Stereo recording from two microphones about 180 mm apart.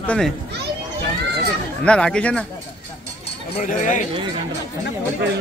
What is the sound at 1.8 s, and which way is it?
Speech, 5° left (ahead or behind).